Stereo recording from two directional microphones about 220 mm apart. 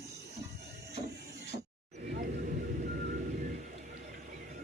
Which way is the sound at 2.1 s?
40° right (ahead or behind).